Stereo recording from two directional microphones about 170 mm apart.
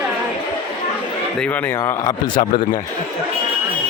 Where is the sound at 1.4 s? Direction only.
10° left (ahead or behind).